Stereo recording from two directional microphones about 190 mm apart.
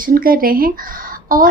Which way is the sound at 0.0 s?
50° right (ahead or behind).